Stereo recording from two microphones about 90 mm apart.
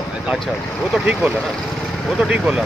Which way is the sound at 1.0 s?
15° right (ahead or behind).